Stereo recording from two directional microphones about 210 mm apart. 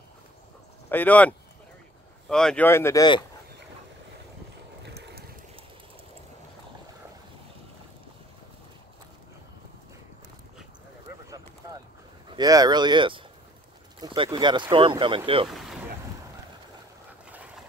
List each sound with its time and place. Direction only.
0.8 s speech: 10° left (ahead or behind)
4.8 s boat: 55° right (ahead or behind)
12.3 s speech: 20° right (ahead or behind)
15.4 s speech: centre (ahead or behind)